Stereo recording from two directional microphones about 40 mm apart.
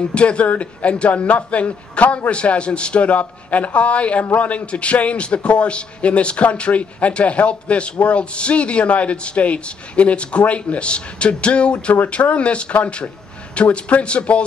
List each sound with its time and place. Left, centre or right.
0.1 s a man's voice: left